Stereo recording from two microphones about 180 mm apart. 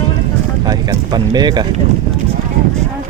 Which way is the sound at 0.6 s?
20° right (ahead or behind).